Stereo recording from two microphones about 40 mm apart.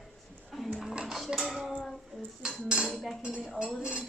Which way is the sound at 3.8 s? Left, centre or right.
Right.